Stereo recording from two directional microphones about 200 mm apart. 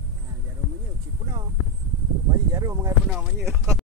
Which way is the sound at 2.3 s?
15° right (ahead or behind).